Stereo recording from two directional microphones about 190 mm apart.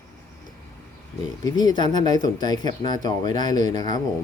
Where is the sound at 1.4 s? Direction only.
20° left (ahead or behind).